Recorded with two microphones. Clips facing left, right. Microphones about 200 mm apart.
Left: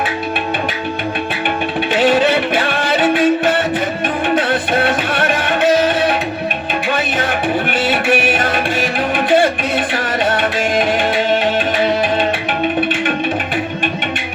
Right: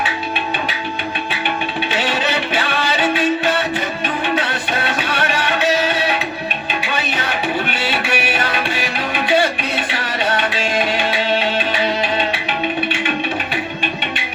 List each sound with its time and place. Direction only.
1.9 s music: 50° left (ahead or behind)